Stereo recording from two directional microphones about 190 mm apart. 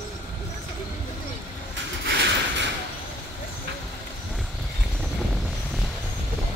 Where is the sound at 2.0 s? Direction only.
60° right (ahead or behind).